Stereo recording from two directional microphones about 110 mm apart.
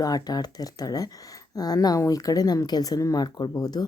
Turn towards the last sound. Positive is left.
turn(degrees=35)  # may be behind; listen again after turning